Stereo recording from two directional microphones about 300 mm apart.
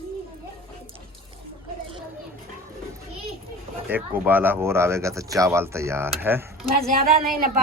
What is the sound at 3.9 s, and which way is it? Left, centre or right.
Speech, centre.